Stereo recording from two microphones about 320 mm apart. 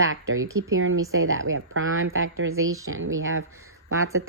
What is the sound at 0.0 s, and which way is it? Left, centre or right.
A woman's voice, right.